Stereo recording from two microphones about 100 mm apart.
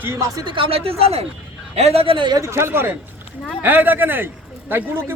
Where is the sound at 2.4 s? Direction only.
25° right (ahead or behind).